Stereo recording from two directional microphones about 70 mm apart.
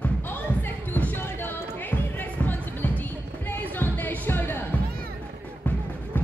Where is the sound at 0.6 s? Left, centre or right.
Left.